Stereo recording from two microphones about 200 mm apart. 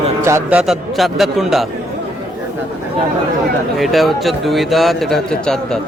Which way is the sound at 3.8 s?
Centre (ahead or behind).